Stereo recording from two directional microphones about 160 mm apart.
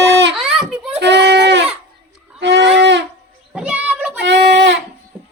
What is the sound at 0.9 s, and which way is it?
Goat, 90° right.